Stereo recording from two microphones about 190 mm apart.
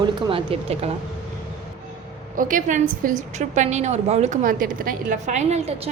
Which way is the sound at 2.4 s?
45° right (ahead or behind).